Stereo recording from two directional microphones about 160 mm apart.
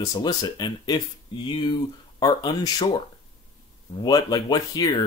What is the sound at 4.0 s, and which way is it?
Speech, 25° left (ahead or behind).